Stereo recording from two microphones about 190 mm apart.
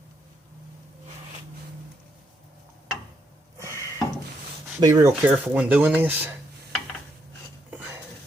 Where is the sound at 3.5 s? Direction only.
15° right (ahead or behind).